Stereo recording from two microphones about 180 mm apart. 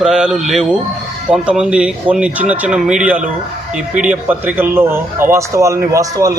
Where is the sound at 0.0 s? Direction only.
5° right (ahead or behind).